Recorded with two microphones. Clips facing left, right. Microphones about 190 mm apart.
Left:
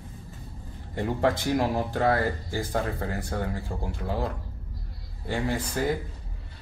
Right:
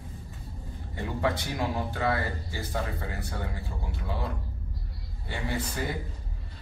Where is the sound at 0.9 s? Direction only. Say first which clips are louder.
Left 4 dB; 45° left (ahead or behind).